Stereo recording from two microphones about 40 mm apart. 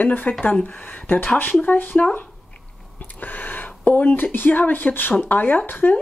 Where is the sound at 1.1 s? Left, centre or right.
Left.